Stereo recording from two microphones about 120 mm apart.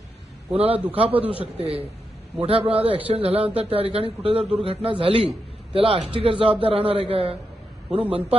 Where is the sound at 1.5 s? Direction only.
55° right (ahead or behind).